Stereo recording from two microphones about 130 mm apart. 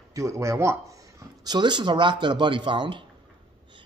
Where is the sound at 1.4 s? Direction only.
35° right (ahead or behind).